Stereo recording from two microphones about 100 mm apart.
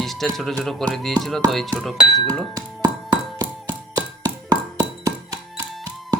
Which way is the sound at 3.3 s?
40° right (ahead or behind).